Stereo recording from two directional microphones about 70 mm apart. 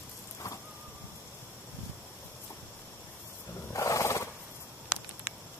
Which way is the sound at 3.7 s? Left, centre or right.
Left.